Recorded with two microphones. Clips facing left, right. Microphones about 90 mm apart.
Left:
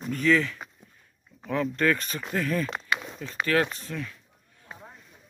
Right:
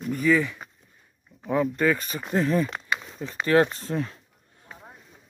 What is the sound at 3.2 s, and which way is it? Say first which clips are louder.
Speech: right 6 dB; 20° right (ahead or behind).